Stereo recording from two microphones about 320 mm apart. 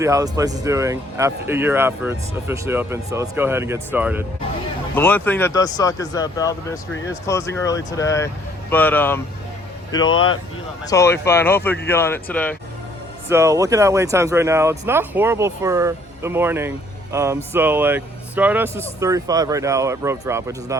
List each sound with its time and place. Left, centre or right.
0.0 s speech: centre
4.9 s speech: centre
13.2 s speech: centre